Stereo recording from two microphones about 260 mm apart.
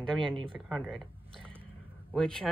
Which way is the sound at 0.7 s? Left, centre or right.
Centre.